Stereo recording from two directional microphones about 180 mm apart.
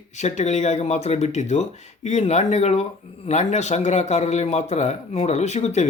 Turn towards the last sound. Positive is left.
turn(degrees=35)  # may be behind; listen again after turning